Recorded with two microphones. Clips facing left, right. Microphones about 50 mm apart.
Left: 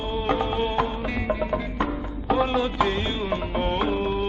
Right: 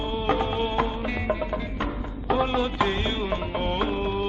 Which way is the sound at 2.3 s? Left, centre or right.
Centre.